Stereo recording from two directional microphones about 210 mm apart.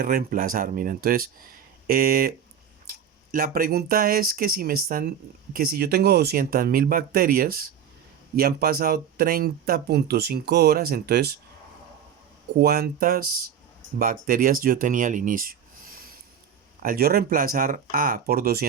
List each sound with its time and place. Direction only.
0.0 s speech: 45° right (ahead or behind)
3.3 s speech: 45° right (ahead or behind)
12.5 s speech: 45° right (ahead or behind)
16.8 s speech: 45° right (ahead or behind)